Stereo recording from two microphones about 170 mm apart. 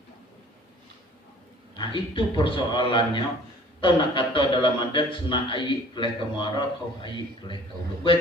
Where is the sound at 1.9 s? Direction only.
30° left (ahead or behind).